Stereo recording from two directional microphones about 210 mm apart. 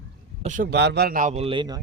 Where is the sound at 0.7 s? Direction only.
55° right (ahead or behind); by 1.8 s 20° right (ahead or behind).